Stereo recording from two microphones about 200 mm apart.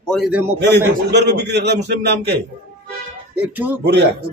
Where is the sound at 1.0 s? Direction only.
55° right (ahead or behind).